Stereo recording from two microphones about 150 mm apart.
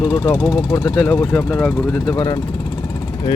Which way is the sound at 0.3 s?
5° right (ahead or behind).